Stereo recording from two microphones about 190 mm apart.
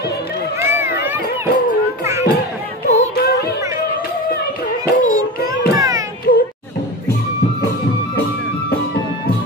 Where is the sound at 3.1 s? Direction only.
55° left (ahead or behind).